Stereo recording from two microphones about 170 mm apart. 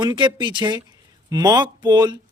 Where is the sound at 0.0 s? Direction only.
25° right (ahead or behind).